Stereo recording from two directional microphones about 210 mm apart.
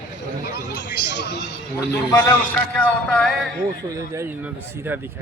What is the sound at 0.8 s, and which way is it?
Speech, 55° left (ahead or behind).